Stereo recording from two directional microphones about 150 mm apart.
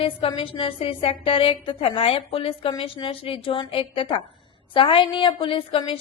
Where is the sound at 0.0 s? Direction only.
35° left (ahead or behind).